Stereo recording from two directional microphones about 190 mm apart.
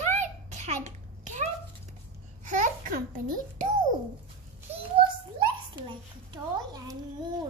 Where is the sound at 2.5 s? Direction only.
45° right (ahead or behind).